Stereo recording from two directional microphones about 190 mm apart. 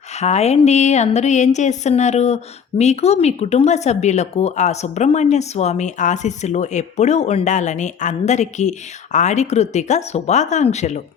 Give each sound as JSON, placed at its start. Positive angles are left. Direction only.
{"t": 0.1, "sound": "speech", "side_deg": 35}